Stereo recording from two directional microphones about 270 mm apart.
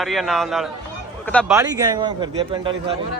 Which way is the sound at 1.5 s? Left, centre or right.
Centre.